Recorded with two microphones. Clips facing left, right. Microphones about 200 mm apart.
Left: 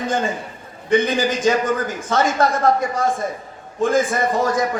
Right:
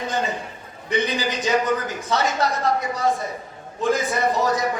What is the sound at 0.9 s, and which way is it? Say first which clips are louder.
A man's voice: left 6 dB; 50° left (ahead or behind).